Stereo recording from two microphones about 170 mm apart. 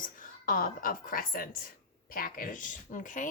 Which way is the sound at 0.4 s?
55° left (ahead or behind).